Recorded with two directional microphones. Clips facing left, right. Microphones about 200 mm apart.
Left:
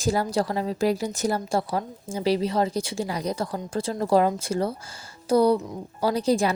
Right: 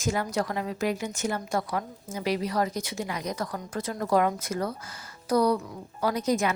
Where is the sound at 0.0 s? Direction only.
35° left (ahead or behind).